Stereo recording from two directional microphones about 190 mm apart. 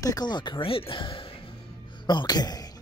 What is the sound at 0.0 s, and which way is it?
Speech, 20° left (ahead or behind).